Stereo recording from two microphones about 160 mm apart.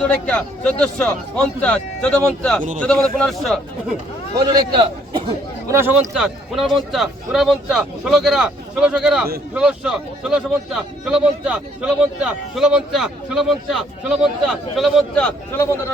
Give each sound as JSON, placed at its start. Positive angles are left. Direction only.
{"t": 0.3, "sound": "a man's voice", "side_deg": 5}
{"t": 4.4, "sound": "a man's voice", "side_deg": -25}
{"t": 6.1, "sound": "a man's voice", "side_deg": 0}